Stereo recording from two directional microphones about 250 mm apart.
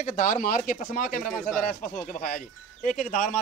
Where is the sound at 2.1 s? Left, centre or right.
Left.